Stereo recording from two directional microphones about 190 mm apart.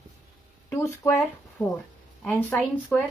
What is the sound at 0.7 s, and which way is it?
Speech, 15° left (ahead or behind).